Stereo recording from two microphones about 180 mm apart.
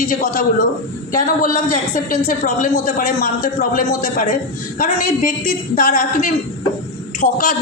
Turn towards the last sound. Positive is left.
turn(degrees=55)  # may be behind; listen again after turning